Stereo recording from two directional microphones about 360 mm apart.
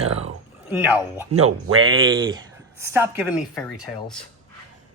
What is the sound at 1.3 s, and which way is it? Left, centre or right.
Speech, right.